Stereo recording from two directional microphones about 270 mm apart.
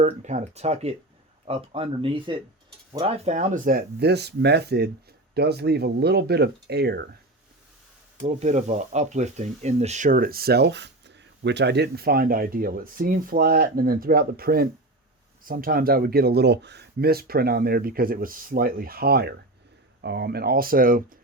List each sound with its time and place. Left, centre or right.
0.0 s speech: right
8.2 s speech: right